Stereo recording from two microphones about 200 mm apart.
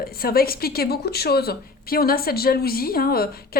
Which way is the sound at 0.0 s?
50° left (ahead or behind).